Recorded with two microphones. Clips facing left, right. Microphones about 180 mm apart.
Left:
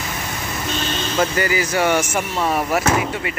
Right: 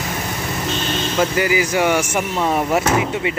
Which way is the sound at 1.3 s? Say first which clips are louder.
Right 2 dB; 10° right (ahead or behind).